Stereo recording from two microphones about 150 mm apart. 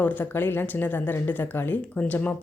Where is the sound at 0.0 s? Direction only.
10° left (ahead or behind).